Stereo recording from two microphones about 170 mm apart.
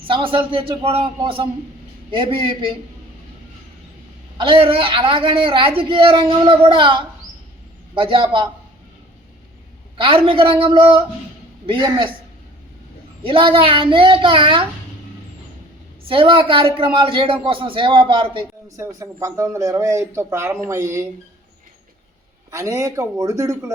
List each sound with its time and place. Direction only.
0.0 s a man's voice: 30° right (ahead or behind)
4.4 s a man's voice: 30° right (ahead or behind)
10.0 s a man's voice: 30° right (ahead or behind)
13.2 s speech: 30° right (ahead or behind)
16.0 s speech: 30° right (ahead or behind)
22.5 s speech: 20° right (ahead or behind)